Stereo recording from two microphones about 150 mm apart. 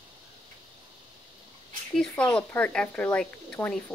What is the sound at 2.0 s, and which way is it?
Speech, 5° left (ahead or behind).